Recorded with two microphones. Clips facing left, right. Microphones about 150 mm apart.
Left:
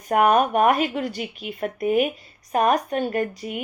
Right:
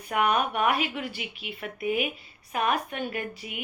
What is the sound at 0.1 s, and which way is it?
Speech, 45° left (ahead or behind).